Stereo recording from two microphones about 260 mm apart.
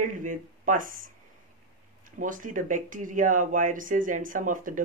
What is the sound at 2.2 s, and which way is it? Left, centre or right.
Speech, right.